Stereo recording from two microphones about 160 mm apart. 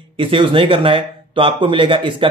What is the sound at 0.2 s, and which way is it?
Speech, 30° right (ahead or behind).